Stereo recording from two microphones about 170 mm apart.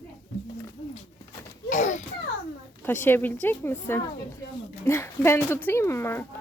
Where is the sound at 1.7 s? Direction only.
45° left (ahead or behind).